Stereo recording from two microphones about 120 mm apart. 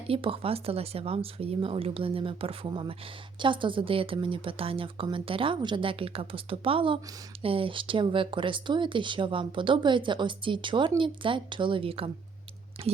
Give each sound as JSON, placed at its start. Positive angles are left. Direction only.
{"t": 0.1, "sound": "speech", "side_deg": -50}